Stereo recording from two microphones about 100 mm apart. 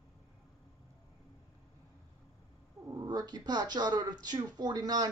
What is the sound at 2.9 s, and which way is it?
Speech, 40° right (ahead or behind).